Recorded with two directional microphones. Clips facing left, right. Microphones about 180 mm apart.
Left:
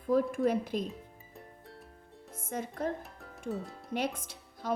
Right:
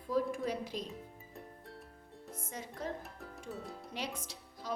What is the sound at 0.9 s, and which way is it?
Music, centre (ahead or behind).